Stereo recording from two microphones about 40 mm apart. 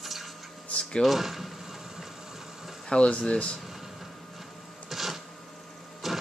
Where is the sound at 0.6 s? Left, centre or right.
Left.